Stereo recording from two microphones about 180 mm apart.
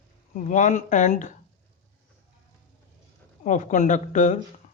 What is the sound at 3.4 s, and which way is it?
Speech, 45° left (ahead or behind).